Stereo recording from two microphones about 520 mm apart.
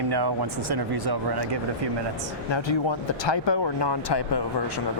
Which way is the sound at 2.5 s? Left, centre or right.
Left.